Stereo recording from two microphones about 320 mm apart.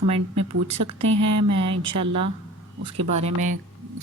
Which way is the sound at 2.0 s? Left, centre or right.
Right.